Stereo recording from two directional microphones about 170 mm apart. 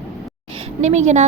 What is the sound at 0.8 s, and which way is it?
Speech, 40° right (ahead or behind).